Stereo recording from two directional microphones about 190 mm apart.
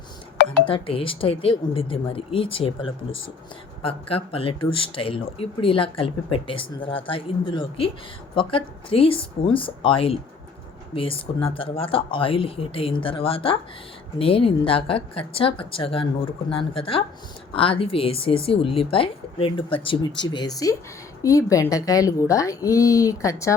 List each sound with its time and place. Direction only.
0.4 s speech: 30° left (ahead or behind)